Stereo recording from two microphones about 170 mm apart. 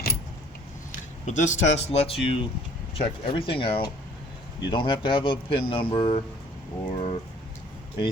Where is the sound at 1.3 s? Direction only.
45° left (ahead or behind).